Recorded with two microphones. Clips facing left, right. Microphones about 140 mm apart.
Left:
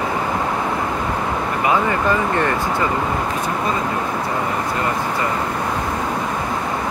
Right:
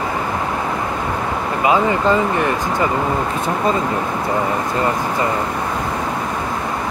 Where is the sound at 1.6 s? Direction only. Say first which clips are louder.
Right 3 dB; 20° right (ahead or behind).